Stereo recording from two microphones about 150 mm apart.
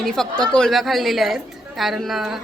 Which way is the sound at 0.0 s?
5° left (ahead or behind).